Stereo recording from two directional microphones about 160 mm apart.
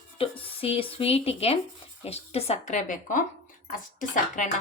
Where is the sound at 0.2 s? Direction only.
35° left (ahead or behind).